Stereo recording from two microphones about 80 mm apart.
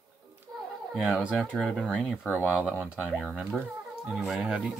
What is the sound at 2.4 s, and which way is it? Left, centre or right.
Speech, centre.